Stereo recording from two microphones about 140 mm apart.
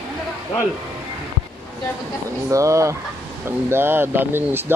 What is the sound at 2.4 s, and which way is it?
Speech, 20° right (ahead or behind).